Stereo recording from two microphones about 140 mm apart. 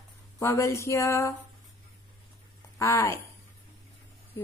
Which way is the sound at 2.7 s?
20° left (ahead or behind).